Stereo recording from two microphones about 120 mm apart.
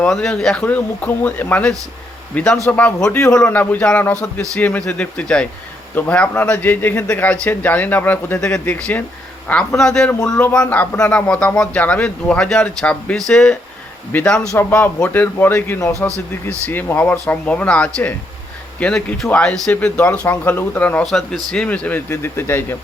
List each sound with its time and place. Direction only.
0.1 s a man's voice: 5° left (ahead or behind)
10.2 s speech: 25° left (ahead or behind)
10.4 s a man's voice: 10° left (ahead or behind)